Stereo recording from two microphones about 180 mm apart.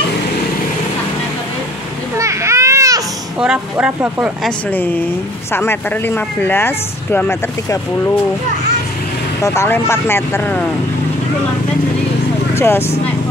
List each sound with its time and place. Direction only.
2.1 s children playing: 15° right (ahead or behind)
3.3 s speech: 5° right (ahead or behind)
4.5 s speech: 10° left (ahead or behind)
9.4 s speech: 15° left (ahead or behind)
12.5 s speech: 15° left (ahead or behind)